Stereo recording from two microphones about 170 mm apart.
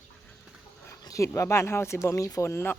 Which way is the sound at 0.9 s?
20° left (ahead or behind).